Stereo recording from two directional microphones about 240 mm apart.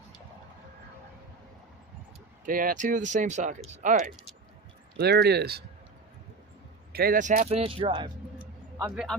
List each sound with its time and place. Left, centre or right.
2.5 s speech: right
4.9 s speech: right
6.9 s speech: right
8.4 s a sound: centre